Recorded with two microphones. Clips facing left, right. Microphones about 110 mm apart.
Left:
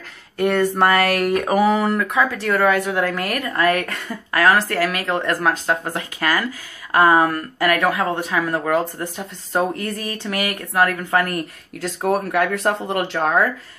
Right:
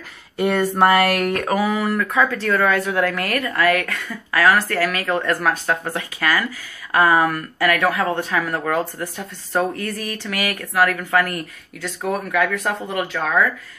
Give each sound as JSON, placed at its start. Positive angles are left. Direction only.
{"t": 0.7, "sound": "speech", "side_deg": -5}
{"t": 1.6, "sound": "speech", "side_deg": 25}
{"t": 11.8, "sound": "speech", "side_deg": 35}